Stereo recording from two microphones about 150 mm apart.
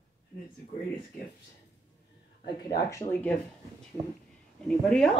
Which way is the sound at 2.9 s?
10° left (ahead or behind).